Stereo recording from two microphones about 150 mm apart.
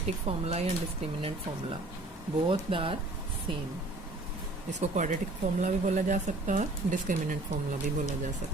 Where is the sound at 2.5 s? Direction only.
35° right (ahead or behind).